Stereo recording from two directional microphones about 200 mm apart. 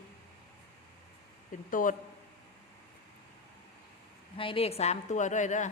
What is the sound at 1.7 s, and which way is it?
Speech, 40° left (ahead or behind).